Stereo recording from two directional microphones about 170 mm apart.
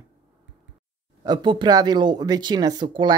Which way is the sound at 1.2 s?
25° right (ahead or behind).